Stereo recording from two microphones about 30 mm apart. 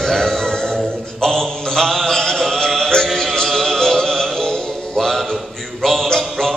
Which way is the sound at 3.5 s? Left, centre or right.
Centre.